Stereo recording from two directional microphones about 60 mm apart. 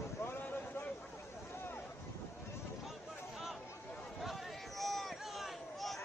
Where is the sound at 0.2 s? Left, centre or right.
Left.